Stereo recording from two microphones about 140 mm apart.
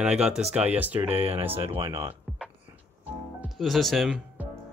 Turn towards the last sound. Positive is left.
turn(degrees=0)  # may be behind; listen again after turning